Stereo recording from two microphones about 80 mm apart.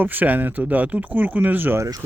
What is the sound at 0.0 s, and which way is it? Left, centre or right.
Speech, right.